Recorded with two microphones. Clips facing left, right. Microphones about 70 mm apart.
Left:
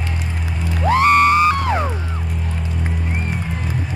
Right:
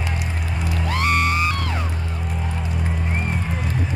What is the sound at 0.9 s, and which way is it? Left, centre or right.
Music, left.